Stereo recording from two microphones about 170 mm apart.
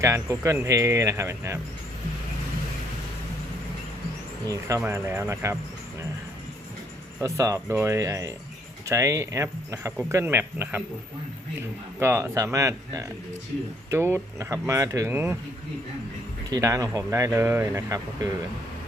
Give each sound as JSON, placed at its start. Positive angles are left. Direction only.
{"t": 0.0, "sound": "speech", "side_deg": -15}
{"t": 4.4, "sound": "speech", "side_deg": -15}
{"t": 7.2, "sound": "speech", "side_deg": -20}
{"t": 11.9, "sound": "speech", "side_deg": -15}
{"t": 16.5, "sound": "speech", "side_deg": -20}